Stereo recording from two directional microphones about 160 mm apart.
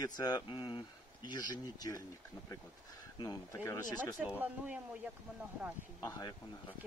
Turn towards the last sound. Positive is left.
turn(degrees=20)  # may be behind; listen again after turning